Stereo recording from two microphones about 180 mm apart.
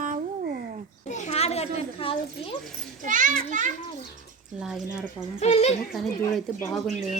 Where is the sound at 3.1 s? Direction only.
45° right (ahead or behind).